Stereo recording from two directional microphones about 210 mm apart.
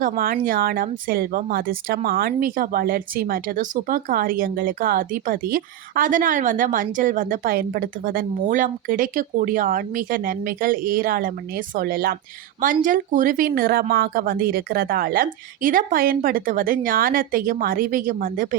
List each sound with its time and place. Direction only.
0.0 s a woman's voice: 40° right (ahead or behind)